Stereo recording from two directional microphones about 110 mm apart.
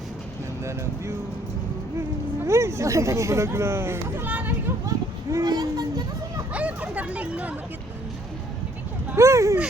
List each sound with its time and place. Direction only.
2.4 s speech: 25° right (ahead or behind)
4.9 s children playing: 30° right (ahead or behind)
6.5 s chatter: 10° right (ahead or behind)
9.1 s speech: 25° right (ahead or behind)